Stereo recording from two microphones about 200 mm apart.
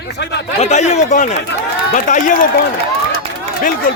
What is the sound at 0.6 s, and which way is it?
Speech, 35° left (ahead or behind).